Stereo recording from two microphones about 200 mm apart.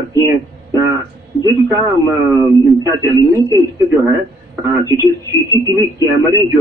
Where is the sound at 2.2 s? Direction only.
15° right (ahead or behind).